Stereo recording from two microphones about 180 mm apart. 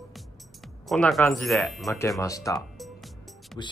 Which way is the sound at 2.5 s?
Centre (ahead or behind).